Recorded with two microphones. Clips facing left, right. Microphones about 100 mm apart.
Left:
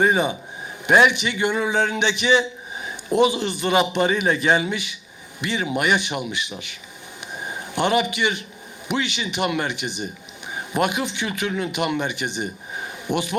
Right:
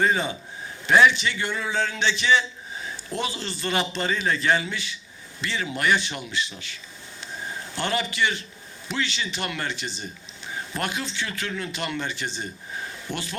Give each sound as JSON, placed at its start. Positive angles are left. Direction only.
{"t": 0.0, "sound": "a man's voice", "side_deg": 15}
{"t": 7.2, "sound": "a sound", "side_deg": 15}
{"t": 8.9, "sound": "a man's voice", "side_deg": 15}